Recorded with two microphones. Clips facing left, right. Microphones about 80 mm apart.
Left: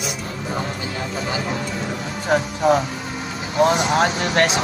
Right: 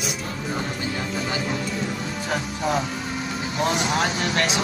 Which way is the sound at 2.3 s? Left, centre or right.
Left.